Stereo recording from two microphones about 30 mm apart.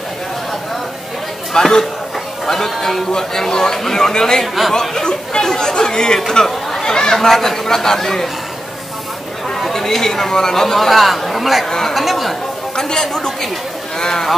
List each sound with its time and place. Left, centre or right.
1.5 s speech: centre
6.4 s chatter: centre
6.9 s speech: left
7.2 s speech: centre
9.7 s speech: centre
12.9 s speech: centre